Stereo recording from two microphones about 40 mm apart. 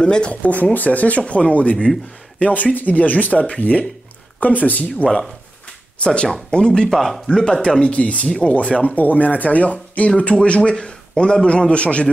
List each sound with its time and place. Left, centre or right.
0.0 s a man's voice: left
0.3 s speech: left
2.4 s speech: left
6.0 s a man's voice: left
6.9 s speech: centre
7.8 s speech: left
8.9 s a man's voice: left